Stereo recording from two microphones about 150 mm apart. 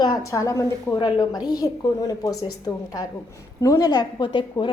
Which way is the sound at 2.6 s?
25° left (ahead or behind).